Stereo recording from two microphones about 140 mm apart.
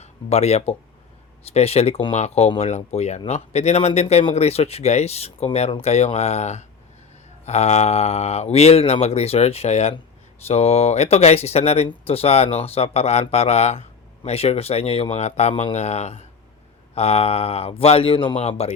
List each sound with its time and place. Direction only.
0.0 s speech: 50° left (ahead or behind)
18.3 s speech: 50° left (ahead or behind)